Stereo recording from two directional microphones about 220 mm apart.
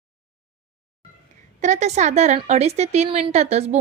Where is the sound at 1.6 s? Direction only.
30° right (ahead or behind).